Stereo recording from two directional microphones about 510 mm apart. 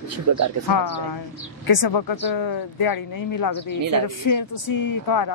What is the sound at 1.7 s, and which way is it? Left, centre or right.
Speech, left.